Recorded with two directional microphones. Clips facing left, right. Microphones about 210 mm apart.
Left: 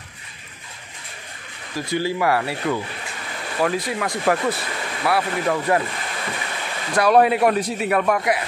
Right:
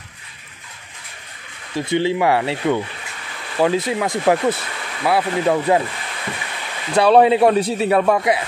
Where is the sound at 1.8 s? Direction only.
25° right (ahead or behind).